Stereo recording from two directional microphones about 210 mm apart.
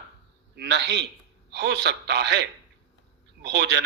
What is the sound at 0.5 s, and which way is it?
A man's voice, 55° right (ahead or behind).